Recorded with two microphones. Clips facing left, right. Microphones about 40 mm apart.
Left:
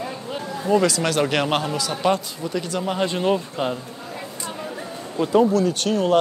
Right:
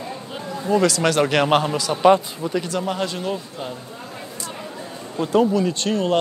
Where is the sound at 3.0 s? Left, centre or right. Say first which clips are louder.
Left 4 dB; left.